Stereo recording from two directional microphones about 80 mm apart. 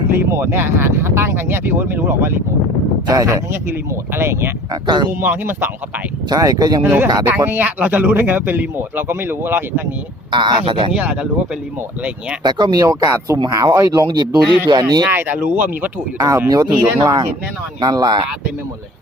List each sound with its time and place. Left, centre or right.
0.2 s speech: right
3.1 s speech: right
3.5 s speech: right
4.7 s speech: right
5.2 s speech: right
6.3 s speech: right
6.8 s speech: right
10.3 s speech: right
10.9 s speech: centre
12.4 s speech: right
12.8 s speech: right
14.1 s speech: right
15.0 s speech: right
16.1 s speech: right